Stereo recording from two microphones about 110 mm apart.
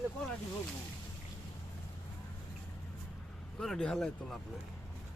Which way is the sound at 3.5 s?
5° left (ahead or behind).